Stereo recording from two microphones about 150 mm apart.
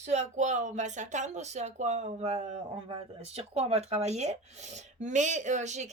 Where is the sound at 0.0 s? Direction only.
50° right (ahead or behind).